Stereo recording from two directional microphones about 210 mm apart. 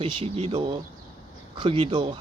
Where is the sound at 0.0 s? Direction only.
30° right (ahead or behind).